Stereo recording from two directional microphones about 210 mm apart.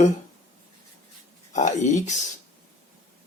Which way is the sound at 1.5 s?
35° left (ahead or behind).